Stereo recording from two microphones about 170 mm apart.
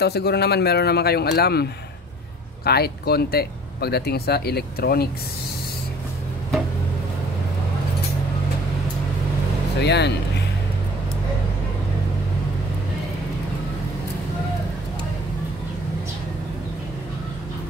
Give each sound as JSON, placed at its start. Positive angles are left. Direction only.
{"t": 0.0, "sound": "speech", "side_deg": 75}
{"t": 9.8, "sound": "speech", "side_deg": 85}